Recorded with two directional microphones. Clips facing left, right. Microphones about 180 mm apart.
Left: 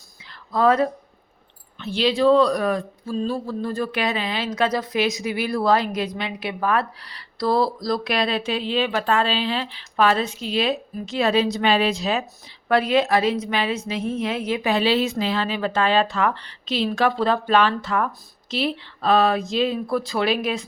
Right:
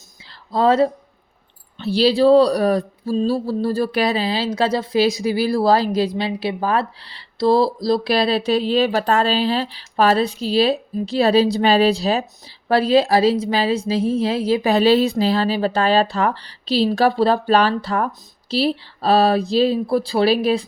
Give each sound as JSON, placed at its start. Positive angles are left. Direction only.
{"t": 0.5, "sound": "speech", "side_deg": -25}